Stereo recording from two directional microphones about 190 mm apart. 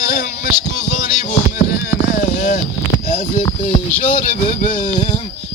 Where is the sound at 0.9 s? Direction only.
40° left (ahead or behind).